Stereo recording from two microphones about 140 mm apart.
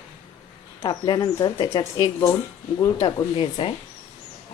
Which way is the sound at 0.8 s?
30° left (ahead or behind).